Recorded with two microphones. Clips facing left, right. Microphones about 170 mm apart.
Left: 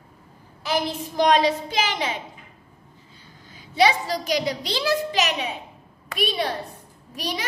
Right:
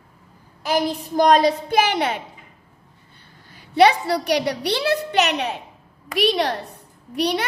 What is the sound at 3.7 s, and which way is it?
A woman's voice, 65° right (ahead or behind).